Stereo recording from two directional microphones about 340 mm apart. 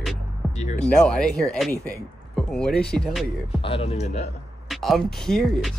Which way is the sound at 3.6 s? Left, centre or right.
Centre.